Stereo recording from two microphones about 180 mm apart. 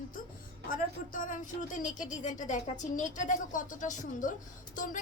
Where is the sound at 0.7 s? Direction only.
45° left (ahead or behind).